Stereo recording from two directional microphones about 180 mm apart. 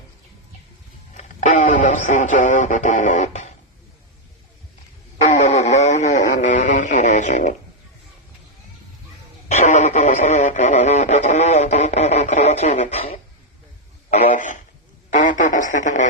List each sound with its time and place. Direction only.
1.1 s speech: 40° left (ahead or behind)
5.2 s radio: 40° left (ahead or behind)
9.5 s radio: 40° left (ahead or behind)
14.1 s a sound: 35° left (ahead or behind)